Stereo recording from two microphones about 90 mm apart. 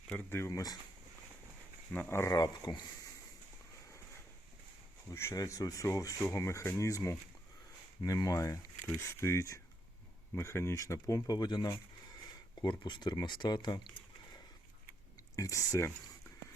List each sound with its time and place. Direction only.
0.3 s speech: 30° left (ahead or behind)
1.9 s speech: 20° left (ahead or behind)
2.3 s speech: 50° left (ahead or behind)
5.1 s speech: 30° left (ahead or behind); by 13.9 s 55° left (ahead or behind)
15.4 s speech: 35° left (ahead or behind)